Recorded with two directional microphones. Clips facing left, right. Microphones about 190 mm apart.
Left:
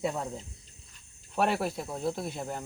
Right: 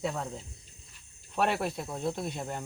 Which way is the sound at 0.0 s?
5° left (ahead or behind).